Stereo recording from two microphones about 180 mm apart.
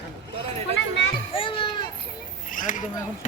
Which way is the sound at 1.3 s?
30° left (ahead or behind).